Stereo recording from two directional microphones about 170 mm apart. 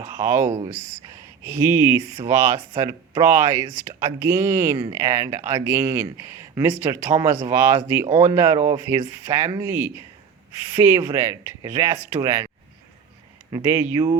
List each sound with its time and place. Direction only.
0.2 s speech: 15° right (ahead or behind)
1.5 s speech: 15° right (ahead or behind)
13.5 s speech: 15° right (ahead or behind)